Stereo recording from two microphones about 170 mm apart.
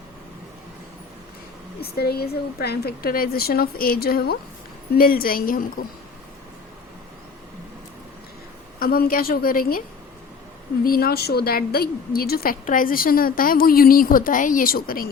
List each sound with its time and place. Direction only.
1.8 s a woman's voice: 70° left (ahead or behind)
8.8 s a woman's voice: 60° left (ahead or behind)
10.8 s a woman's voice: 60° left (ahead or behind)